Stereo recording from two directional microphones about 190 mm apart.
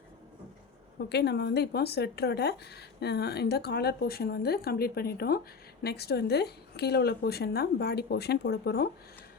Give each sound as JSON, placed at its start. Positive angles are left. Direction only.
{"t": 1.1, "sound": "speech", "side_deg": 60}